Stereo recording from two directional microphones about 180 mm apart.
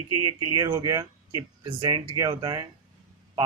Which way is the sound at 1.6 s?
25° right (ahead or behind).